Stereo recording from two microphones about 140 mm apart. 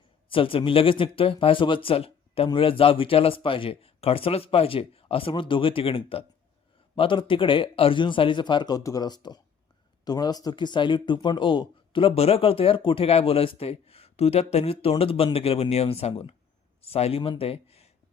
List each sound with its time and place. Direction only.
0.3 s speech: 40° left (ahead or behind)